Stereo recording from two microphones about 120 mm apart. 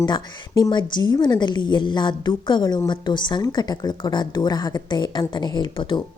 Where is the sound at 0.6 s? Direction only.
40° left (ahead or behind).